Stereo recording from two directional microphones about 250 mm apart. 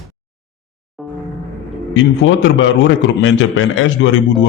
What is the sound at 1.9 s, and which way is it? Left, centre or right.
A man's voice, left.